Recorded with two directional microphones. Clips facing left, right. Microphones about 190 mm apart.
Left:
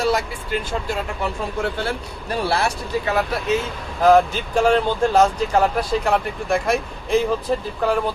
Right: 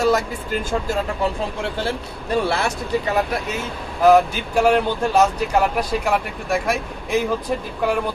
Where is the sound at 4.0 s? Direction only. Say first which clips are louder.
Even; 10° right (ahead or behind).